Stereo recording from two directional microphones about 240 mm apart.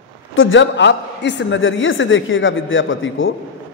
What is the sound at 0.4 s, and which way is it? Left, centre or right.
A man's voice, left.